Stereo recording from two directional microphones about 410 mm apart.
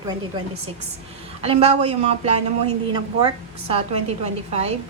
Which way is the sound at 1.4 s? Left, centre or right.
Centre.